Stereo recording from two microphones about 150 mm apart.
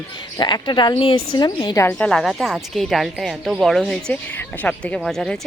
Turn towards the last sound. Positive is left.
turn(degrees=0)  # may be behind; listen again after turning